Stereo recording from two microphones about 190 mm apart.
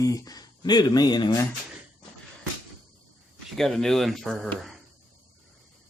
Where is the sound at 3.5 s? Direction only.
Centre (ahead or behind).